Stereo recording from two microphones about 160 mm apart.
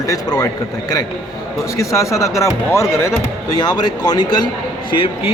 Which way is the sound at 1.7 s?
20° left (ahead or behind).